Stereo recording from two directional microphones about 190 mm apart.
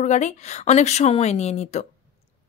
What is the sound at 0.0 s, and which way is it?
Speech, 40° left (ahead or behind).